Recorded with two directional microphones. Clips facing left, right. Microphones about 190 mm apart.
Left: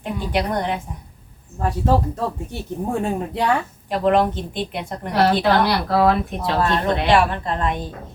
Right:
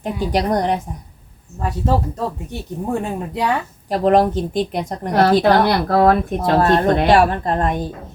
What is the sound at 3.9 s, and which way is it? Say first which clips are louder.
A woman's voice: right 3 dB; 40° right (ahead or behind).